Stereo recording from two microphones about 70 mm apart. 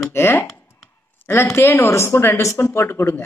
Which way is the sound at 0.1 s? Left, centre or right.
Left.